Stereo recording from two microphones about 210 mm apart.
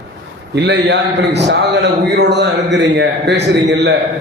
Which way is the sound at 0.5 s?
55° right (ahead or behind).